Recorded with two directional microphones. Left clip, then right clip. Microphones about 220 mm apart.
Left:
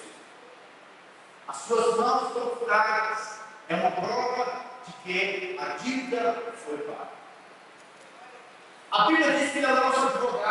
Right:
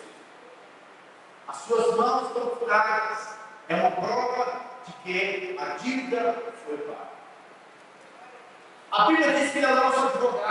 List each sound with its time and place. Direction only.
1.5 s speech: 5° right (ahead or behind)
3.2 s a sound: 20° right (ahead or behind)
3.6 s speech: 5° right (ahead or behind)
8.9 s speech: 5° right (ahead or behind)